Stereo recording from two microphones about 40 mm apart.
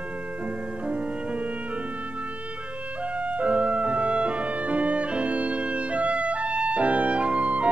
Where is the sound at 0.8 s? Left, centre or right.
Right.